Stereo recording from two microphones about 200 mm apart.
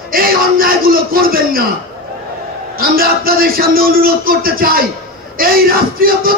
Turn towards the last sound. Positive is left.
turn(degrees=-45)  # may be behind; listen again after turning